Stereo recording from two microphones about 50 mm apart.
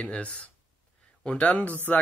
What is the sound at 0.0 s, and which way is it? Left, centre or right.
Speech, left.